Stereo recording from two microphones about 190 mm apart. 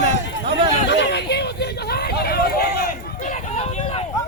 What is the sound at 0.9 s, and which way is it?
Hubbub, 65° left (ahead or behind).